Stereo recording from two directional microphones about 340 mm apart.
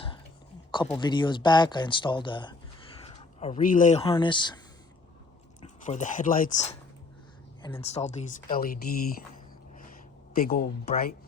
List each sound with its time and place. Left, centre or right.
0.9 s speech: centre
5.6 s speech: left
7.6 s speech: centre